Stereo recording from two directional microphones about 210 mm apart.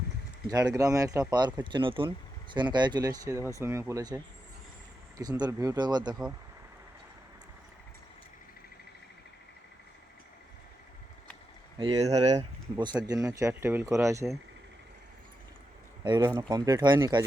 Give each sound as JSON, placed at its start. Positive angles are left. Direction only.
{"t": 0.4, "sound": "speech", "side_deg": -15}
{"t": 11.8, "sound": "speech", "side_deg": -25}
{"t": 12.7, "sound": "speech", "side_deg": -20}
{"t": 16.0, "sound": "speech", "side_deg": -20}